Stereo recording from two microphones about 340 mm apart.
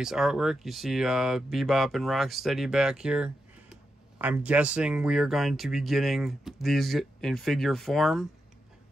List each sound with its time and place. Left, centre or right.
0.0 s speech: centre